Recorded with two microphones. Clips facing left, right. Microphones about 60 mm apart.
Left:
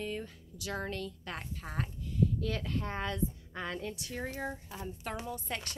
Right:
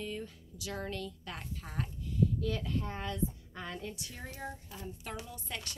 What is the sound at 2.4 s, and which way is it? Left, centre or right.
A woman's voice, left.